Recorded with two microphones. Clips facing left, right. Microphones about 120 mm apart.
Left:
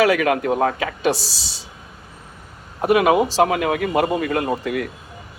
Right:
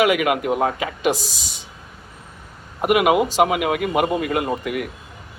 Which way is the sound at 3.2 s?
35° left (ahead or behind).